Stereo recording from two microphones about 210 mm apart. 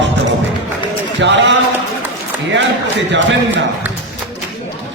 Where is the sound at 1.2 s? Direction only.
60° right (ahead or behind).